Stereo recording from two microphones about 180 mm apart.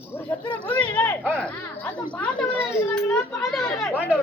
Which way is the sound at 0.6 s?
10° left (ahead or behind).